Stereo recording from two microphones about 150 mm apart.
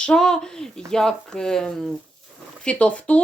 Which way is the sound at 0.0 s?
5° left (ahead or behind).